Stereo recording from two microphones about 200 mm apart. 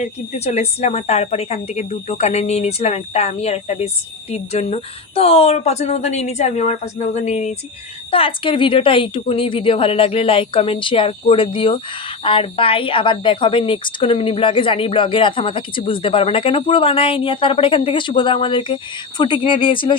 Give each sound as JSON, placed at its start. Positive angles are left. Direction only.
{"t": 0.0, "sound": "a woman's voice", "side_deg": 30}